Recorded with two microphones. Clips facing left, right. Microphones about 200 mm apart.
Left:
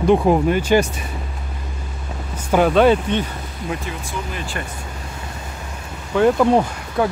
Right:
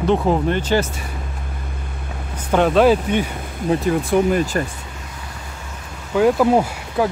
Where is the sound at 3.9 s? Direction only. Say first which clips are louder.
Right 12 dB; 55° right (ahead or behind).